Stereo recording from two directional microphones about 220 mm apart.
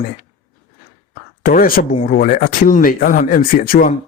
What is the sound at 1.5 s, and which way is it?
Speech, 40° left (ahead or behind).